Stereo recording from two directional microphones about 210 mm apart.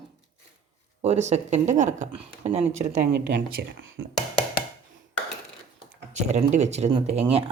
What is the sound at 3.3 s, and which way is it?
Speech, 50° right (ahead or behind).